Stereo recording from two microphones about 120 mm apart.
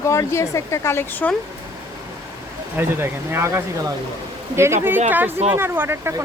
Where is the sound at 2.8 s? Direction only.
20° right (ahead or behind).